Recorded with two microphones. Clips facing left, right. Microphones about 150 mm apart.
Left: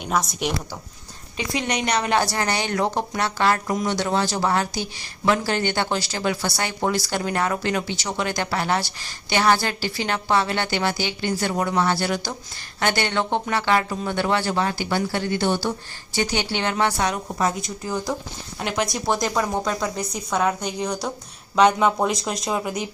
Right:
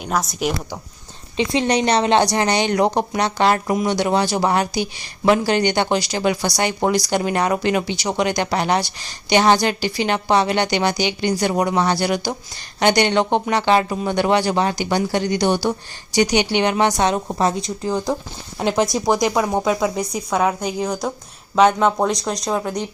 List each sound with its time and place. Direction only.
0.0 s speech: centre (ahead or behind)
1.4 s speech: 30° right (ahead or behind)
19.2 s speech: 20° right (ahead or behind); by 22.9 s 5° left (ahead or behind)